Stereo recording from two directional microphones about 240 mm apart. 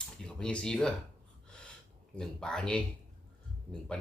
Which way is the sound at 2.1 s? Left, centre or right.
Centre.